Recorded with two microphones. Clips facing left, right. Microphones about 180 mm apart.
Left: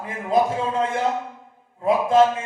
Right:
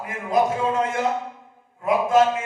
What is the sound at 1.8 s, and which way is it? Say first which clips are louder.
Speech: left 1 dB; 30° left (ahead or behind).